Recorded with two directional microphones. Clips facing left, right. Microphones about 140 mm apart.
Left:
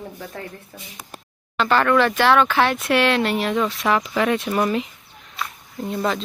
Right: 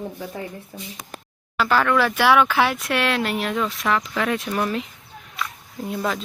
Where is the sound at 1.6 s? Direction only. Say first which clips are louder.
Left 2 dB; 5° right (ahead or behind).